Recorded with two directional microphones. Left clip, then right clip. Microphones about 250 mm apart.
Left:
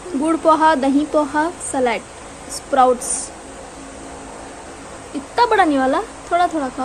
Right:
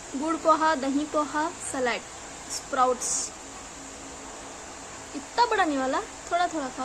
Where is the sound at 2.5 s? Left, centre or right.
Centre.